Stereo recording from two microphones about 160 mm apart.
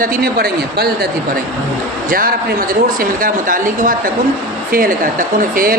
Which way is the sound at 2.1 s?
65° right (ahead or behind).